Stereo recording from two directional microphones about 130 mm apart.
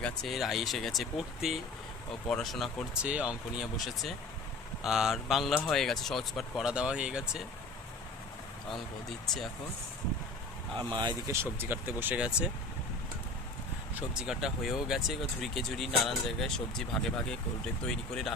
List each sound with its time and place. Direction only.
0.0 s speech: centre (ahead or behind)
8.7 s speech: 5° left (ahead or behind)
10.8 s speech: 35° right (ahead or behind)
11.3 s speech: 15° right (ahead or behind)
14.1 s speech: 5° right (ahead or behind)